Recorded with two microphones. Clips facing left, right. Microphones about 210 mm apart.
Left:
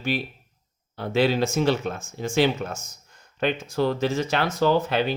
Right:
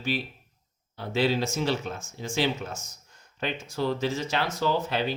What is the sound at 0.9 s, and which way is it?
Speech, 60° left (ahead or behind).